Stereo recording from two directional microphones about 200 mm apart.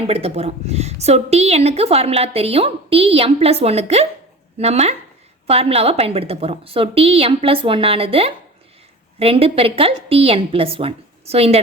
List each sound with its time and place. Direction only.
0.1 s a woman's voice: 30° right (ahead or behind)